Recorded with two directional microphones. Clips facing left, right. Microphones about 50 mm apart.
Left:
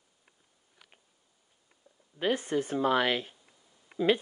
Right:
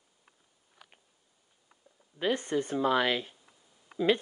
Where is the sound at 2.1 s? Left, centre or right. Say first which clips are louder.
Even; centre.